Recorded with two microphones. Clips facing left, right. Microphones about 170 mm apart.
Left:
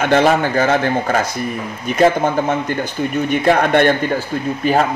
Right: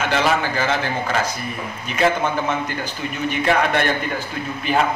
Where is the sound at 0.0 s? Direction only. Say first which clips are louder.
Left 6 dB; 50° left (ahead or behind).